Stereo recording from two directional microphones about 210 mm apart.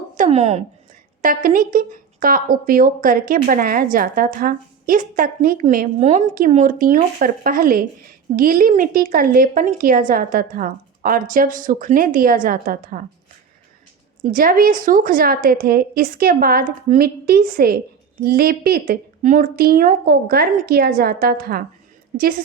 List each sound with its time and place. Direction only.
0.2 s a woman's voice: 30° right (ahead or behind)
1.2 s a woman's voice: 40° right (ahead or behind)
14.2 s a woman's voice: 40° right (ahead or behind)